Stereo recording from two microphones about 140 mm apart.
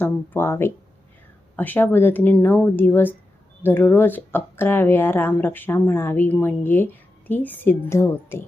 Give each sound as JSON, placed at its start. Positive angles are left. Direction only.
{"t": 0.0, "sound": "speech", "side_deg": 15}